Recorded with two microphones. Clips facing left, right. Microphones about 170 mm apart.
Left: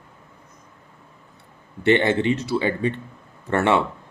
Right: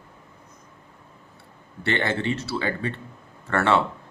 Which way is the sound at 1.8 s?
20° left (ahead or behind).